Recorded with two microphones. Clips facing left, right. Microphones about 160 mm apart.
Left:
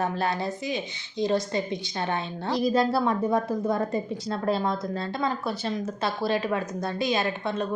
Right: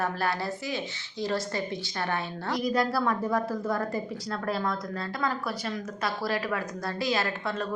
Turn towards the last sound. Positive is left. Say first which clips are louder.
# left 3 dB
turn(degrees=20)  # may be behind; listen again after turning